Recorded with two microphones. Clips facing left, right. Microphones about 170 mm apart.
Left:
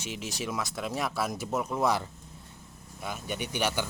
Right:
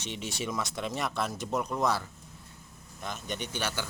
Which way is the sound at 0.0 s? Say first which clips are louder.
Even; centre (ahead or behind).